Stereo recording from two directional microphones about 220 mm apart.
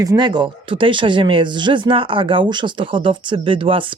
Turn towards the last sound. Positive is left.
turn(degrees=-25)  # may be behind; listen again after turning